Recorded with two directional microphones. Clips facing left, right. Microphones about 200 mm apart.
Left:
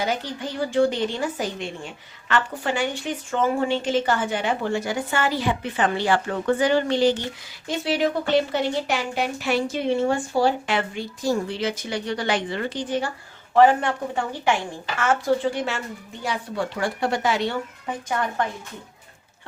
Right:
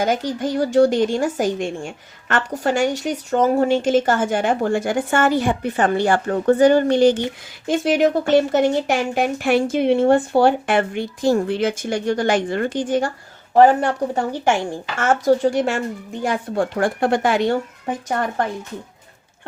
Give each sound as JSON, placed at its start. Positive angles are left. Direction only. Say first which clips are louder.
{"t": 0.0, "sound": "a woman's voice", "louder": "right 6 dB", "side_deg": -45}